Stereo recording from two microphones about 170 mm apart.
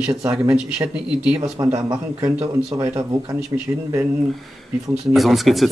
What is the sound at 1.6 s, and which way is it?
Speech, 20° right (ahead or behind).